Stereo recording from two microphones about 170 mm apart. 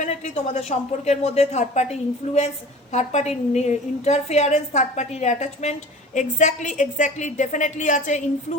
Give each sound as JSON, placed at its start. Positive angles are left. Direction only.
{"t": 0.0, "sound": "a woman's voice", "side_deg": 40}